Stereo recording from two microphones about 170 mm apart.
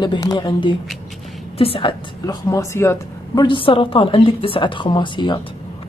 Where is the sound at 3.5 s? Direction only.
30° left (ahead or behind).